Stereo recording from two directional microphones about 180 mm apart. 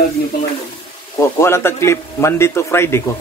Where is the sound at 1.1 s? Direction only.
15° left (ahead or behind).